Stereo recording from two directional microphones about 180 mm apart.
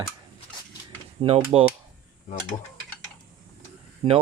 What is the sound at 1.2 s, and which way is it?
Speech, 30° right (ahead or behind).